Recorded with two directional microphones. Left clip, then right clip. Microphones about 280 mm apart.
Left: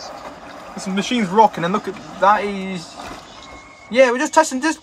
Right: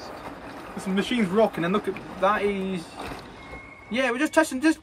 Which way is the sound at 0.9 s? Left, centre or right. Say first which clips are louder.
Left 8 dB; left.